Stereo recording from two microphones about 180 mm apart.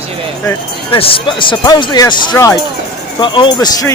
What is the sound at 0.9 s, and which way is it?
Speech, 30° left (ahead or behind).